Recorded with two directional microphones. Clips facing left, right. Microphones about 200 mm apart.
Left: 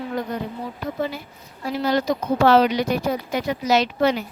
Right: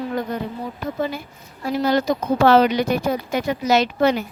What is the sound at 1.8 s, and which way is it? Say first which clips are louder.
Speech: right 1 dB; 50° right (ahead or behind).